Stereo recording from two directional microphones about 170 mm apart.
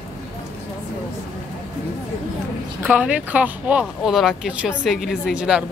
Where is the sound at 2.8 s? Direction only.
10° right (ahead or behind).